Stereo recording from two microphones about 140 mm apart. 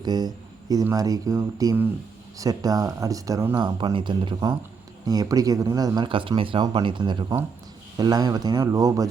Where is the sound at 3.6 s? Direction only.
35° right (ahead or behind).